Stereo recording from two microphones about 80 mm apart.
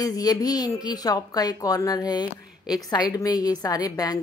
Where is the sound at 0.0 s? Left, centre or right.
Left.